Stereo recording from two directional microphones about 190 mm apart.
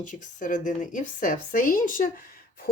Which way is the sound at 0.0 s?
45° left (ahead or behind).